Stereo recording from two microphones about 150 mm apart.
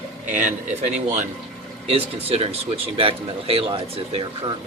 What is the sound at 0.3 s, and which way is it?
Speech, 55° right (ahead or behind).